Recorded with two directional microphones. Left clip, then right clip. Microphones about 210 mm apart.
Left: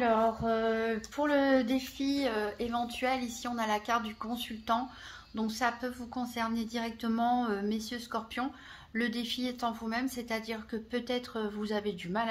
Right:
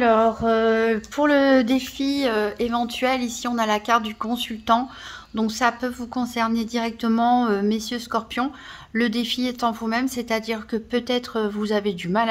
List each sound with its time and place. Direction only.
0.0 s speech: 40° right (ahead or behind)